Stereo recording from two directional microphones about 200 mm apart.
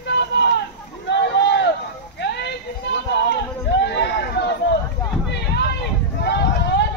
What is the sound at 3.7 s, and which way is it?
Chatter, 60° left (ahead or behind).